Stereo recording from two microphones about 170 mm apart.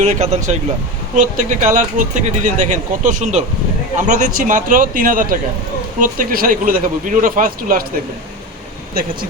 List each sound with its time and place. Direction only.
0.0 s speech: 40° right (ahead or behind)
8.9 s speech: 60° right (ahead or behind)